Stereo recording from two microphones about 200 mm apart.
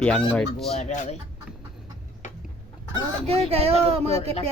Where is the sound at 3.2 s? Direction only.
30° right (ahead or behind).